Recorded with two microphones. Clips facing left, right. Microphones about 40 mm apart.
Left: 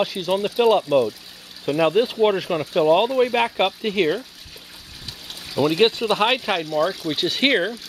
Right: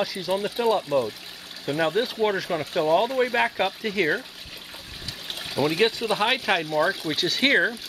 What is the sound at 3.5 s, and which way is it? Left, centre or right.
Speech, left.